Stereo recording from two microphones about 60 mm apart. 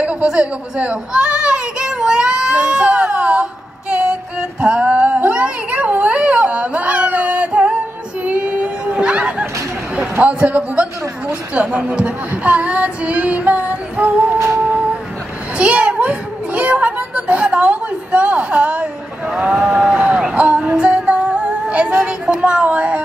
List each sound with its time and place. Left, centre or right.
0.0 s children playing: centre
3.9 s music: centre
8.2 s female singing: right
8.9 s music: centre
9.9 s a man's voice: right
14.6 s a sound: right
20.3 s female singing: right